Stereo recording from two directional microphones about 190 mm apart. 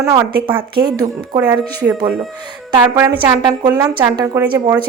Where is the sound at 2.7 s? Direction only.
20° right (ahead or behind).